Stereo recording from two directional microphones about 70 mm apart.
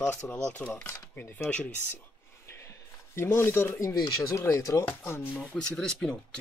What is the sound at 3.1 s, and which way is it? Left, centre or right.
Speech, left.